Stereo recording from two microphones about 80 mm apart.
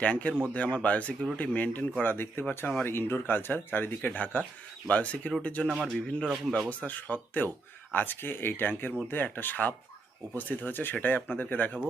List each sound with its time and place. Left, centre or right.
0.0 s speech: centre
6.7 s speech: left